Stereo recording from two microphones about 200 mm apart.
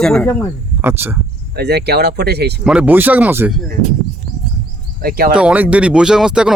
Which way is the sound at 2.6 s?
5° right (ahead or behind).